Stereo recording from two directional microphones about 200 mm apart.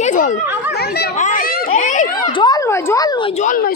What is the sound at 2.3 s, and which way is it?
Speech, 20° left (ahead or behind).